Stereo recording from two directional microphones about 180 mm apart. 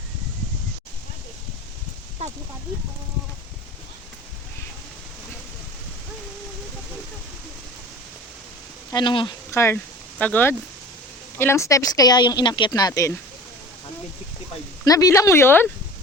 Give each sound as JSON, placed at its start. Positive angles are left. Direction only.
{"t": 2.2, "sound": "speech", "side_deg": -35}
{"t": 8.9, "sound": "speech", "side_deg": 25}
{"t": 14.8, "sound": "speech", "side_deg": 20}